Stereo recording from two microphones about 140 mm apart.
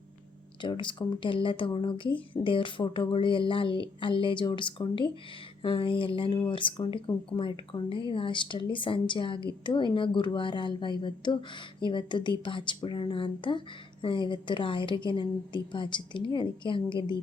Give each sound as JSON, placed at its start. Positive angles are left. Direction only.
{"t": 0.6, "sound": "speech", "side_deg": 35}